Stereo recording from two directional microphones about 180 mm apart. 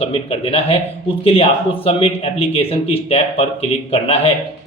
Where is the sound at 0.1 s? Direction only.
35° left (ahead or behind).